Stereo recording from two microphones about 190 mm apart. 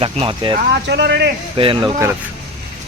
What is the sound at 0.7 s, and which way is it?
Speech, 65° right (ahead or behind).